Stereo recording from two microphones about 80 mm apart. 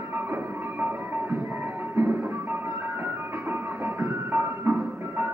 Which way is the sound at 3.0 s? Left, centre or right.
Right.